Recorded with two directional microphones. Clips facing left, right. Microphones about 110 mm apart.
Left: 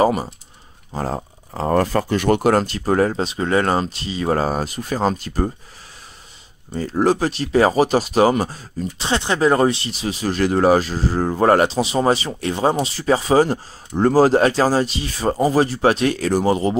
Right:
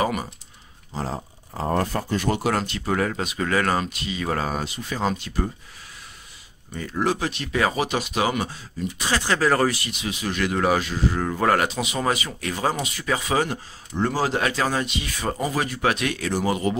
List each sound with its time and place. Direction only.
0.0 s speech: 30° left (ahead or behind)
0.9 s speech: 50° left (ahead or behind)
1.5 s speech: 90° left; by 2.5 s 60° left (ahead or behind)
2.5 s speech: 40° left (ahead or behind)
6.7 s speech: 35° left (ahead or behind)
9.0 s speech: 20° left (ahead or behind)